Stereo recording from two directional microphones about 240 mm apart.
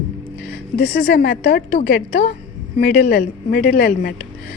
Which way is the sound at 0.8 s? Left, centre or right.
Left.